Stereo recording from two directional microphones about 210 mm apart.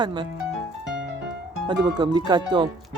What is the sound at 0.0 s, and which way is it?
Speech, 20° right (ahead or behind).